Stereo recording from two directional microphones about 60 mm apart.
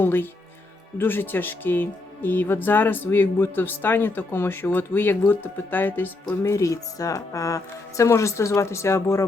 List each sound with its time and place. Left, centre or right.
0.0 s speech: left
6.5 s speech: left